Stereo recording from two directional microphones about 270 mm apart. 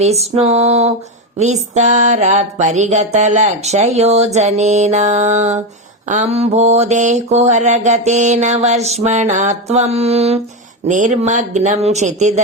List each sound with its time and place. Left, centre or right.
0.0 s mantra: right